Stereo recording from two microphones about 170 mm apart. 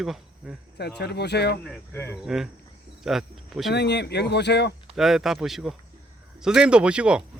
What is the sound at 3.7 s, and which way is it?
Speech, 80° left.